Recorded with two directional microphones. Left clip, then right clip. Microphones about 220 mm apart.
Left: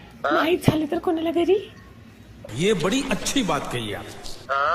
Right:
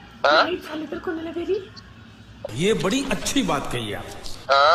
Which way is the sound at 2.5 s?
Centre (ahead or behind).